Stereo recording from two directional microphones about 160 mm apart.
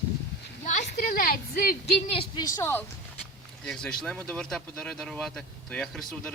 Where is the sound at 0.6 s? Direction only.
50° left (ahead or behind); by 2.0 s 65° left (ahead or behind).